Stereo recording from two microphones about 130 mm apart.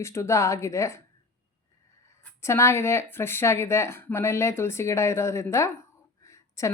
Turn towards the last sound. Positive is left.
turn(degrees=25)  # may be behind; listen again after turning